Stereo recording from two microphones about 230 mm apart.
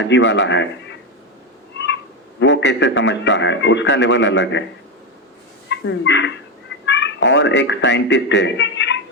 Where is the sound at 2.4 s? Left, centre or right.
Left.